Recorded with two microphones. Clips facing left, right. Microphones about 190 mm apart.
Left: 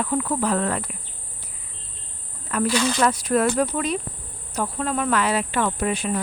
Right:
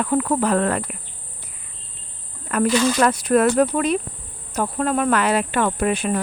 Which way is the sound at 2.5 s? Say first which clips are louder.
Right 4 dB; 60° right (ahead or behind).